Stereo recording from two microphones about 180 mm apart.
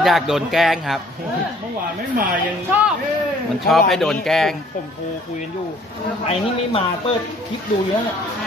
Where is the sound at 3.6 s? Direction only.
Centre (ahead or behind).